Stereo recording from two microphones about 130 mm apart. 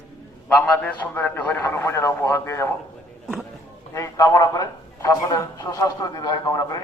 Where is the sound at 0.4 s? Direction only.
10° left (ahead or behind).